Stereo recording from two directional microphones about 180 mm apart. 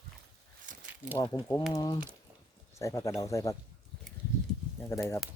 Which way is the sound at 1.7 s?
20° left (ahead or behind).